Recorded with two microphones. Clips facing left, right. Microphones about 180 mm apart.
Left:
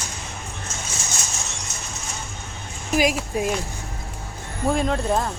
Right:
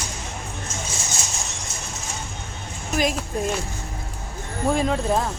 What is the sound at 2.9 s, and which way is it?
Speech, 10° left (ahead or behind).